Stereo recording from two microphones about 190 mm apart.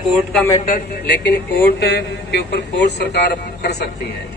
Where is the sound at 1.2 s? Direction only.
55° left (ahead or behind).